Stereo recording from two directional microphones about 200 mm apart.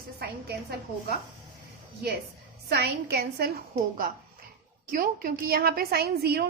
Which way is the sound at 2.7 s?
55° right (ahead or behind).